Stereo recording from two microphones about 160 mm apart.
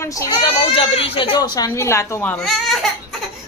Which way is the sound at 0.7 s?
35° left (ahead or behind).